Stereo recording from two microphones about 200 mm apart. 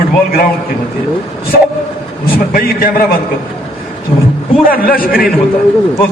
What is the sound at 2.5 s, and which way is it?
Speech, 50° left (ahead or behind).